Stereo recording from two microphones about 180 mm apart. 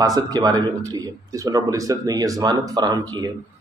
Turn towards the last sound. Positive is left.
turn(degrees=-20)  # may be behind; listen again after turning